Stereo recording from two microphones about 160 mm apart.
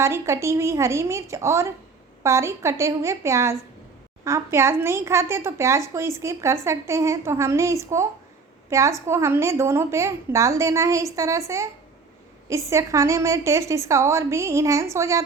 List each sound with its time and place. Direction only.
0.0 s a woman's voice: 15° right (ahead or behind)